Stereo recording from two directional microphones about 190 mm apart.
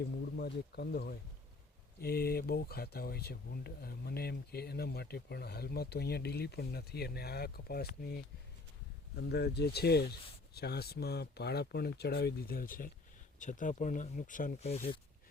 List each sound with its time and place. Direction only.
0.3 s speech: 55° left (ahead or behind); by 14.9 s 35° left (ahead or behind)